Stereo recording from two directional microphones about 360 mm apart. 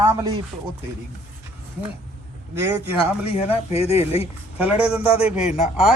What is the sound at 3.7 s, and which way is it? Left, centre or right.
Speech, centre.